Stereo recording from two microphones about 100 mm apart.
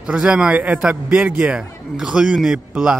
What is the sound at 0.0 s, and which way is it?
A man's voice, 10° right (ahead or behind).